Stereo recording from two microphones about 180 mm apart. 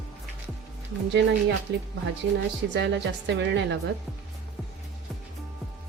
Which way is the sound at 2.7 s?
75° right (ahead or behind).